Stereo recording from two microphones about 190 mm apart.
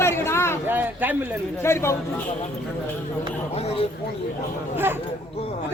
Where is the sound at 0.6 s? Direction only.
10° right (ahead or behind).